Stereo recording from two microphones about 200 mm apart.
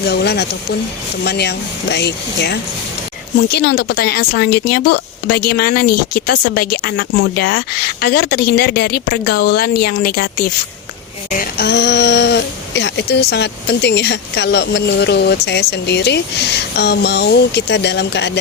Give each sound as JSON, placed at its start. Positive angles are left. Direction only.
{"t": 0.0, "sound": "speech", "side_deg": 55}